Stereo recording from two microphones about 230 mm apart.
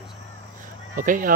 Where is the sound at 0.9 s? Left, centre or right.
Right.